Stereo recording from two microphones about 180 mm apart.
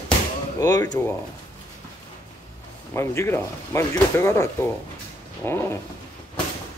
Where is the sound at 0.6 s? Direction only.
20° left (ahead or behind).